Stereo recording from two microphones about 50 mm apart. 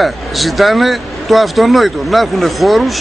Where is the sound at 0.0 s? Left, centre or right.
Centre.